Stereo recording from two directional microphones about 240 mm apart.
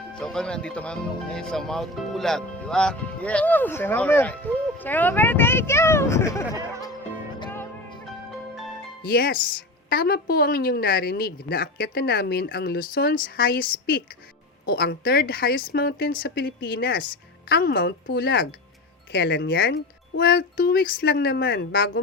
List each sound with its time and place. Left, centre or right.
0.1 s speech: centre
7.3 s music: centre
9.0 s speech: left